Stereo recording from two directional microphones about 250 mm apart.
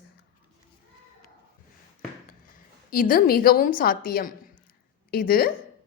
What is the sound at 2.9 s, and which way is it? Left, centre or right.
A woman's voice, left.